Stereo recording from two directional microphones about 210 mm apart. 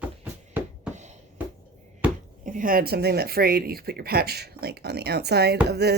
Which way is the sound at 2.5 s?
40° right (ahead or behind).